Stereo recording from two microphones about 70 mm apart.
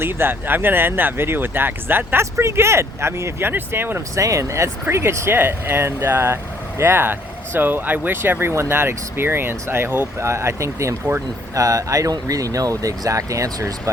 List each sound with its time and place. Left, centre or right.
0.0 s speech: right
4.1 s speech: right